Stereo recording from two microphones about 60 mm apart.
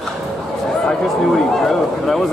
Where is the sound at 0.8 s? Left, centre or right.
Centre.